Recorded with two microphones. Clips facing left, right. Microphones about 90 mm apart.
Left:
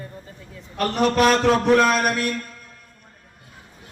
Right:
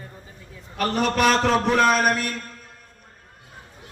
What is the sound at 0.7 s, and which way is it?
A man's voice, centre (ahead or behind).